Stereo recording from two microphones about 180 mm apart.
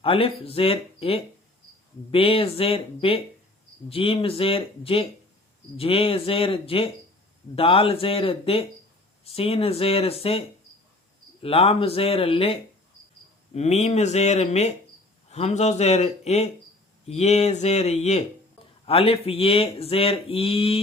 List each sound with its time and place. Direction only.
0.0 s speech: 30° left (ahead or behind)
11.4 s speech: 35° left (ahead or behind)